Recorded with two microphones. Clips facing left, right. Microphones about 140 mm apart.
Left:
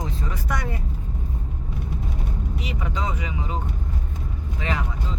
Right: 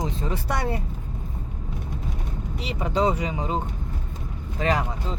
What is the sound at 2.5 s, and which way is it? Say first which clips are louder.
Speech: right 8 dB; 30° right (ahead or behind).